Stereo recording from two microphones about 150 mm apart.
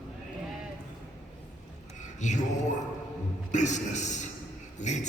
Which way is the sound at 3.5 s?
50° left (ahead or behind).